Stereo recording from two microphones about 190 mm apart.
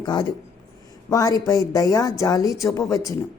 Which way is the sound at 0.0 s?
20° left (ahead or behind).